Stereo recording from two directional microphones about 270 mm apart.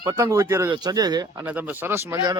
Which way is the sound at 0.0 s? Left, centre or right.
Centre.